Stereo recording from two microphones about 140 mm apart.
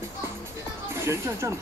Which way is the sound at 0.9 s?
20° right (ahead or behind).